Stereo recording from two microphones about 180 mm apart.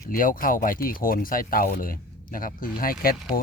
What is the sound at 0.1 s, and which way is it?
Speech, 50° left (ahead or behind).